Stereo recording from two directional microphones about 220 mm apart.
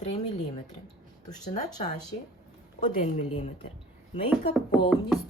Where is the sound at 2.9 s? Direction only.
35° left (ahead or behind).